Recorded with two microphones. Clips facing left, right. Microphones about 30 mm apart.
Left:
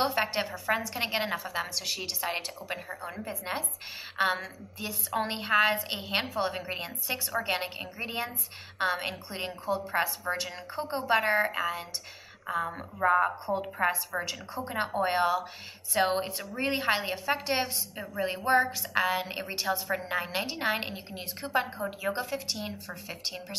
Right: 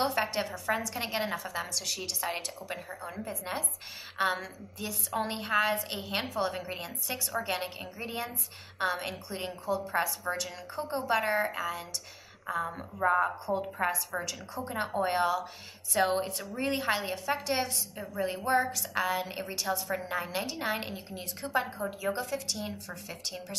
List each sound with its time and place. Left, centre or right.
0.0 s a woman's voice: centre